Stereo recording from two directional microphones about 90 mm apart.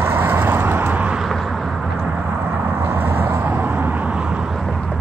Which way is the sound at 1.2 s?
Centre (ahead or behind).